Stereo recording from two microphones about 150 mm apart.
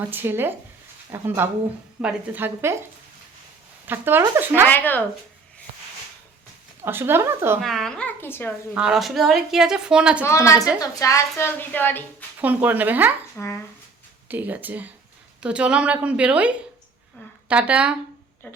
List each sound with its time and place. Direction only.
0.1 s a woman's voice: 15° right (ahead or behind)
3.8 s a woman's voice: 15° right (ahead or behind)
4.7 s a woman's voice: 10° left (ahead or behind)
6.8 s a woman's voice: 15° right (ahead or behind)
7.6 s a woman's voice: centre (ahead or behind)
8.7 s a woman's voice: 5° right (ahead or behind)
10.2 s a woman's voice: 20° left (ahead or behind)
12.4 s a woman's voice: 10° right (ahead or behind)
13.3 s a woman's voice: 15° left (ahead or behind)
14.3 s a woman's voice: 10° right (ahead or behind)
17.5 s a woman's voice: 10° right (ahead or behind)